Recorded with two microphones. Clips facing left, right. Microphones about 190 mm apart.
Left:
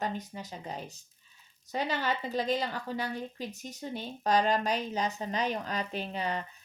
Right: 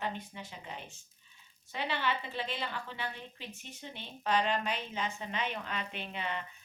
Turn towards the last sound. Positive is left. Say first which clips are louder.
# left 5 dB
turn(degrees=40)  # may be behind; listen again after turning